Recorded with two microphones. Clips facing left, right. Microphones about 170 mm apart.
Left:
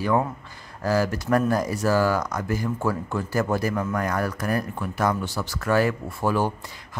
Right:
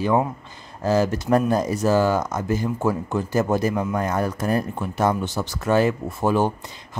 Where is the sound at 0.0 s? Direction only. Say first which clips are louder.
Right 2 dB; 20° right (ahead or behind).